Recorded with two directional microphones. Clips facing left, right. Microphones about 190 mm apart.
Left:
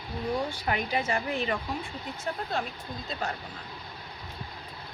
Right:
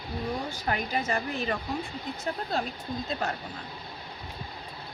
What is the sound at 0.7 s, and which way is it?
Speech, 40° right (ahead or behind).